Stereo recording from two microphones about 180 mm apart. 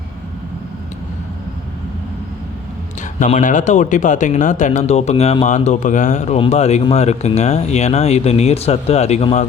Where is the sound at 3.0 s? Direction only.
45° left (ahead or behind).